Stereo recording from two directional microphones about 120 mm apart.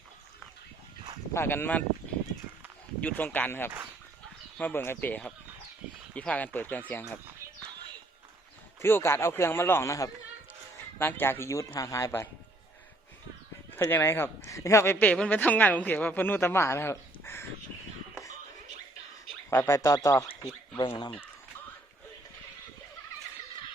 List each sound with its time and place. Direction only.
1.3 s speech: 20° left (ahead or behind)
3.0 s speech: 15° left (ahead or behind)
8.8 s speech: 20° left (ahead or behind)
13.7 s speech: 20° left (ahead or behind)
19.5 s speech: 20° left (ahead or behind)
20.8 s speech: 45° left (ahead or behind)